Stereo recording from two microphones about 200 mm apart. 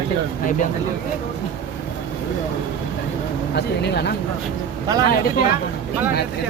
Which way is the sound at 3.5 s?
55° left (ahead or behind).